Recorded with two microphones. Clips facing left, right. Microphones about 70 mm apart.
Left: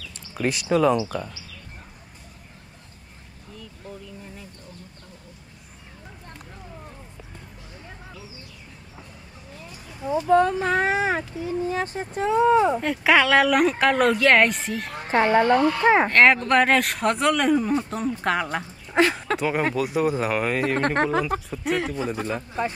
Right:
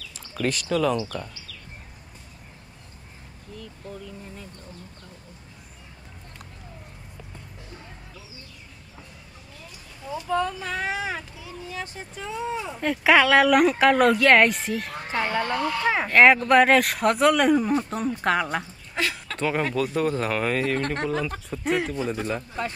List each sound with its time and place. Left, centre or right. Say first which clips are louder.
0.4 s speech: left 3 dB; centre
10.0 s speech: left 7 dB; left
12.8 s speech: right 1 dB; centre
15.3 s speech: left 8 dB; left
16.1 s speech: right 1 dB; centre
18.9 s speech: left 8 dB; left
19.3 s speech: left 2 dB; centre
20.8 s speech: left 5 dB; left
21.5 s speech: even; centre
21.9 s speech: even; centre